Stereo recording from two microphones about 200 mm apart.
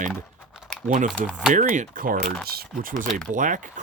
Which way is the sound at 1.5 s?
40° right (ahead or behind).